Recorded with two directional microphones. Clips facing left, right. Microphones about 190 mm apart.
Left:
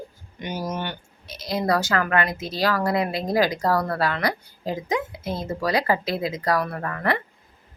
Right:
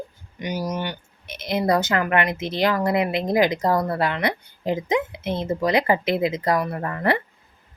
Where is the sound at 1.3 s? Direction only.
20° right (ahead or behind).